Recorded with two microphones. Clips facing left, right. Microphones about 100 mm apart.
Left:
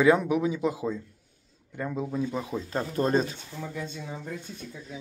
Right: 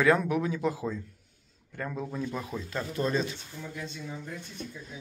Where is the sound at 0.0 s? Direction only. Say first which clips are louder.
Left 3 dB; 15° left (ahead or behind).